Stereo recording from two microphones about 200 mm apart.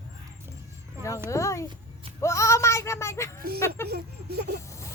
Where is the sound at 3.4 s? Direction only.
50° right (ahead or behind).